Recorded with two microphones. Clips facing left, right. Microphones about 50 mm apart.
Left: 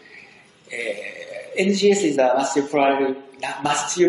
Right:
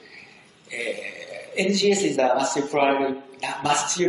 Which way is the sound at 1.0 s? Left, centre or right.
Centre.